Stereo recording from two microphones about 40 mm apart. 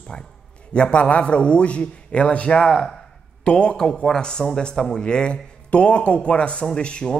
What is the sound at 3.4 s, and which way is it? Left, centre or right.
A man's voice, left.